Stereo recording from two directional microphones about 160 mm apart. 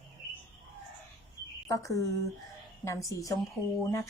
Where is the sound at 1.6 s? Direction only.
20° left (ahead or behind).